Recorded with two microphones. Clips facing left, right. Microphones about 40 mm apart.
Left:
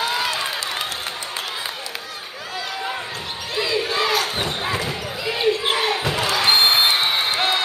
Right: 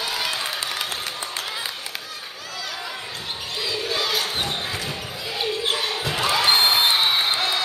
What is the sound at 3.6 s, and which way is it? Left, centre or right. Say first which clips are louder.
Basketball bounce: left 5 dB; left.